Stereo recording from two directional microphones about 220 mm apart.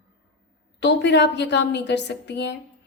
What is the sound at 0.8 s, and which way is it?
A woman's voice, 50° left (ahead or behind).